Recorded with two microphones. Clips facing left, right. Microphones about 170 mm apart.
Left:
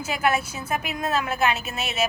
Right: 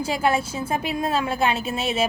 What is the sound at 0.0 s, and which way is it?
A woman's voice, 30° right (ahead or behind).